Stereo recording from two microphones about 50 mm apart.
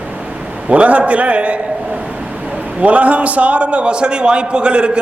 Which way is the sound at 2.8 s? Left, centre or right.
Right.